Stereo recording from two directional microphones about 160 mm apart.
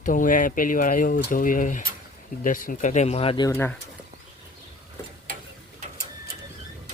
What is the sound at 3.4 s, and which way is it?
Speech, 15° left (ahead or behind).